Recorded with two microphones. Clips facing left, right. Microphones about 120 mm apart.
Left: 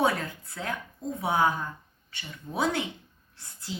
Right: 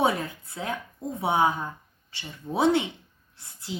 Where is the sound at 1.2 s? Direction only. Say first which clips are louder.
Right 2 dB; 25° right (ahead or behind).